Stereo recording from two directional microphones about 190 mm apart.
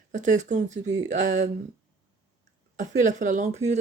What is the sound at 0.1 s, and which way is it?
Speech, 40° right (ahead or behind).